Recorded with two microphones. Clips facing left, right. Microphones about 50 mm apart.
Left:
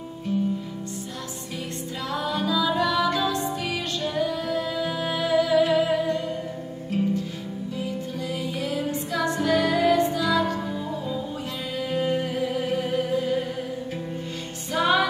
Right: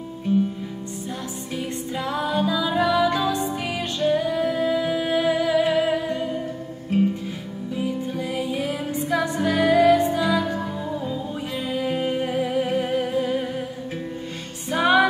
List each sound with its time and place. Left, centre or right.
0.3 s music: centre
2.1 s music: centre
11.7 s music: centre
14.7 s music: centre